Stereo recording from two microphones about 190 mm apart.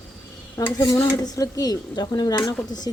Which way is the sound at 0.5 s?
15° left (ahead or behind).